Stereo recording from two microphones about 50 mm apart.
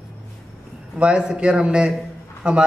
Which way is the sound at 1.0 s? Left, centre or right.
Centre.